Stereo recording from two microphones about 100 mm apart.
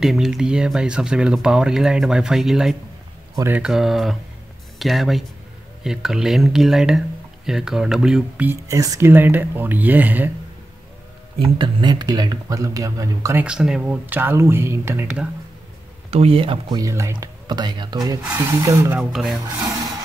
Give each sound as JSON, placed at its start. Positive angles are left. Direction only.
{"t": 0.0, "sound": "speech", "side_deg": -5}
{"t": 8.6, "sound": "speech", "side_deg": -35}
{"t": 9.1, "sound": "speech", "side_deg": -20}
{"t": 11.3, "sound": "speech", "side_deg": -60}
{"t": 13.4, "sound": "speech", "side_deg": -10}
{"t": 14.0, "sound": "speech", "side_deg": -20}
{"t": 16.1, "sound": "speech", "side_deg": -80}
{"t": 16.7, "sound": "speech", "side_deg": -30}
{"t": 17.2, "sound": "speech", "side_deg": -45}
{"t": 19.1, "sound": "speech", "side_deg": 0}